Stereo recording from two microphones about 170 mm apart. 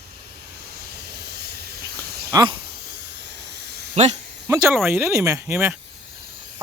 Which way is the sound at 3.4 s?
80° right.